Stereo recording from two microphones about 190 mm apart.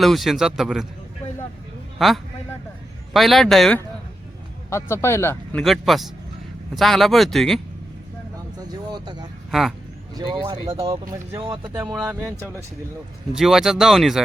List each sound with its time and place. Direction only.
0.0 s speech: centre (ahead or behind)
2.0 s speech: centre (ahead or behind)
4.7 s a man's voice: 15° left (ahead or behind)
8.6 s a sound: 20° right (ahead or behind)
9.5 s speech: centre (ahead or behind)
10.2 s speech: 25° right (ahead or behind)
13.3 s speech: centre (ahead or behind)